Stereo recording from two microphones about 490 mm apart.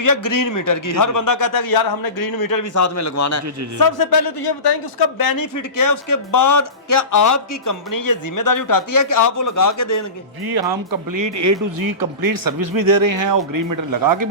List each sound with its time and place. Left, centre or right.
0.0 s speech: left
10.4 s speech: right
11.4 s speech: right